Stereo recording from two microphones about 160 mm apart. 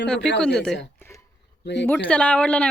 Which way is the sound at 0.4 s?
5° left (ahead or behind).